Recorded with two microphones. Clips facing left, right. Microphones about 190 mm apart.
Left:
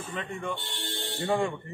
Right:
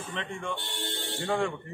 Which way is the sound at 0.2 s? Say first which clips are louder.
Left 1 dB; 5° left (ahead or behind).